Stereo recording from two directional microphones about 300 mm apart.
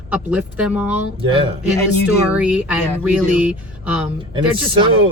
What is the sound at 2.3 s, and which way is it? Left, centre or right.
Speech, centre.